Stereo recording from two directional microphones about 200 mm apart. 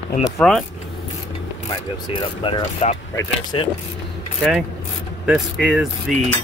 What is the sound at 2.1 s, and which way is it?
Speech, 25° left (ahead or behind).